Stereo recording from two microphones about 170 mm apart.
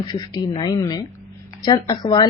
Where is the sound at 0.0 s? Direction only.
25° left (ahead or behind).